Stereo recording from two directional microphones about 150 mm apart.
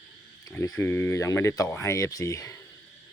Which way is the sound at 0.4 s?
20° left (ahead or behind).